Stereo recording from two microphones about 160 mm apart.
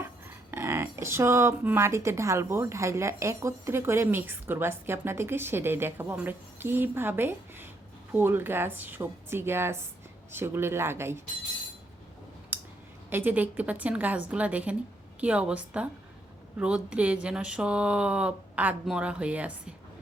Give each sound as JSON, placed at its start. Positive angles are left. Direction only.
{"t": 0.5, "sound": "speech", "side_deg": -15}
{"t": 12.5, "sound": "a sound", "side_deg": -10}
{"t": 13.1, "sound": "speech", "side_deg": -10}